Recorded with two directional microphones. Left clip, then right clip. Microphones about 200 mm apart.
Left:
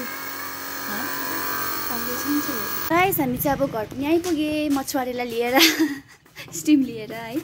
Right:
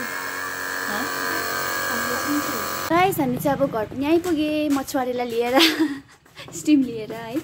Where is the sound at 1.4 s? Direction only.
45° right (ahead or behind).